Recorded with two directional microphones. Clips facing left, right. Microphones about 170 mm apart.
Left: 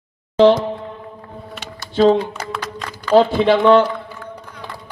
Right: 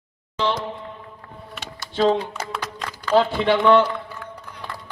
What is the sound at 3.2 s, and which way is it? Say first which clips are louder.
Speech: left 5 dB; 25° left (ahead or behind).